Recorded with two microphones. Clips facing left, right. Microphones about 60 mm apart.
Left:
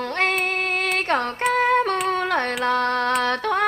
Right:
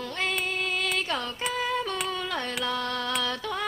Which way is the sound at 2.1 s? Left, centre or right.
Left.